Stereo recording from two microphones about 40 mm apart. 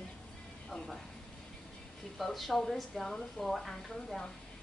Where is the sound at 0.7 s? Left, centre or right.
Centre.